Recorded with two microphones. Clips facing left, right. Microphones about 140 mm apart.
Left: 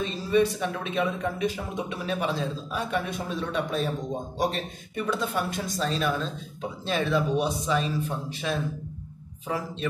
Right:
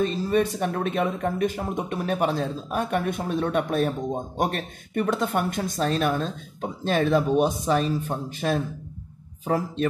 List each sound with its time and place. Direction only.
0.0 s speech: 50° right (ahead or behind)